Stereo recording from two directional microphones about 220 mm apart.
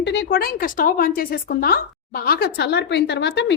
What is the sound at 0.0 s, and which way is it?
Speech, 55° left (ahead or behind).